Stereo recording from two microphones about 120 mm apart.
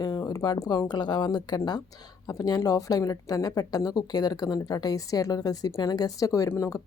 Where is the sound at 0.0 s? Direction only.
35° left (ahead or behind).